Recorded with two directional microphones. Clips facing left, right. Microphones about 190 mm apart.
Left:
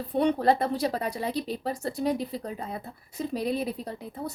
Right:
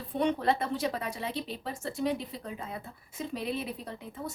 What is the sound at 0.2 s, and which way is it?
Speech, 35° left (ahead or behind).